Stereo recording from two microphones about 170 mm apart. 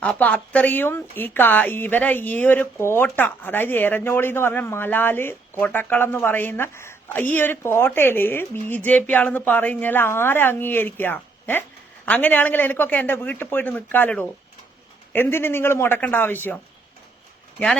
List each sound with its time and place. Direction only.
0.0 s speech: 10° left (ahead or behind)